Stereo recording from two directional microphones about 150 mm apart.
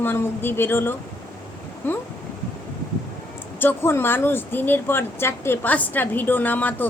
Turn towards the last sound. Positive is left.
turn(degrees=10)  # may be behind; listen again after turning